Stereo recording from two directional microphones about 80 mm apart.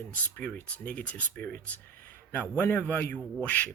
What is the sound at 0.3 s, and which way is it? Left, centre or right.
Speech, left.